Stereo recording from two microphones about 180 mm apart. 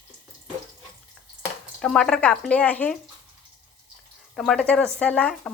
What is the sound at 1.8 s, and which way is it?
Speech, 5° left (ahead or behind).